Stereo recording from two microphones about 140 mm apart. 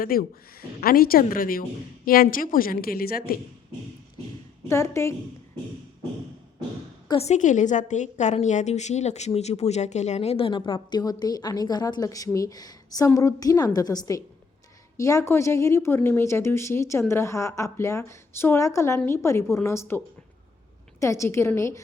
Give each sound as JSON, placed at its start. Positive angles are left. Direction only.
{"t": 0.0, "sound": "speech", "side_deg": 90}
{"t": 4.7, "sound": "a woman's voice", "side_deg": 20}
{"t": 7.2, "sound": "a woman's voice", "side_deg": 55}
{"t": 21.0, "sound": "a woman's voice", "side_deg": 20}